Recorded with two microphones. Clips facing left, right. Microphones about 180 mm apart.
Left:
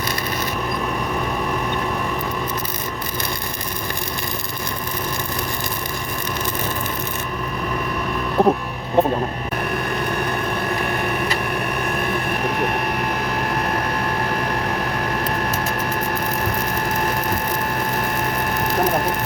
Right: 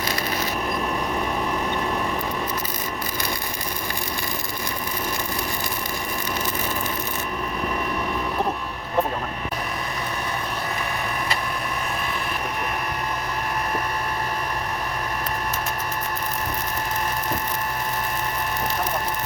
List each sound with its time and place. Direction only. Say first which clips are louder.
8.4 s music: left 11 dB; 40° left (ahead or behind)
9.0 s vehicle: left 6 dB; 25° left (ahead or behind)